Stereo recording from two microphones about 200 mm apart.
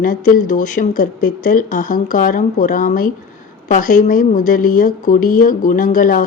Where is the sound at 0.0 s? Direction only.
40° left (ahead or behind).